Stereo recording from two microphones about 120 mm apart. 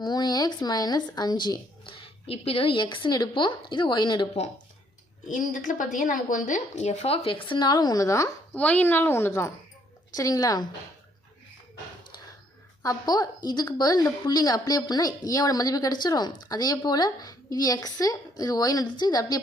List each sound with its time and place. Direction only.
0.0 s a woman's voice: 35° left (ahead or behind)
5.3 s a woman's voice: 90° left; by 8.3 s 25° left (ahead or behind)
8.5 s a woman's voice: 15° left (ahead or behind); by 10.7 s 30° left (ahead or behind)
12.8 s a woman's voice: 30° left (ahead or behind)